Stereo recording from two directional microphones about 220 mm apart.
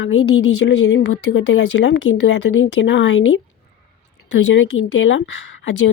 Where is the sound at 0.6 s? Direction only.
50° left (ahead or behind).